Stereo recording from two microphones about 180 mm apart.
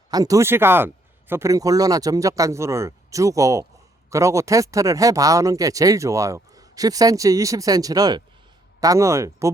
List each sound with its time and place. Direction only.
0.1 s speech: 20° right (ahead or behind)